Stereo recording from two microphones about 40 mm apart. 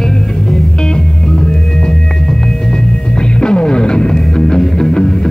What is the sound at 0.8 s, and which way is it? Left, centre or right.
Music, centre.